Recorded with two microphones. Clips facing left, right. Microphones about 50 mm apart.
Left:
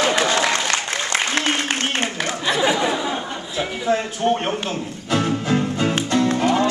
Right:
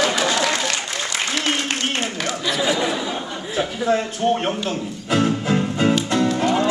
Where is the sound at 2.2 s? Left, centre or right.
Left.